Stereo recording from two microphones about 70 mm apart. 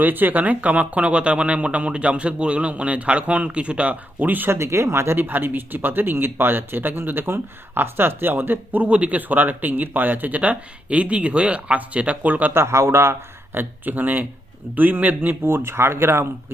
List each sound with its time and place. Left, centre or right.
0.0 s speech: right
4.5 s speech: right
12.5 s speech: right